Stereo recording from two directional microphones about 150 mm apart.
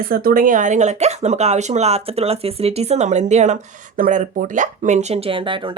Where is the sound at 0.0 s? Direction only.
75° right (ahead or behind).